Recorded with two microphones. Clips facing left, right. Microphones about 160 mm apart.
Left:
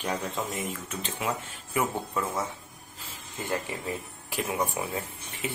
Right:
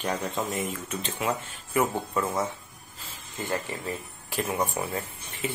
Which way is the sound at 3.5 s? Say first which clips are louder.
Even; 10° left (ahead or behind).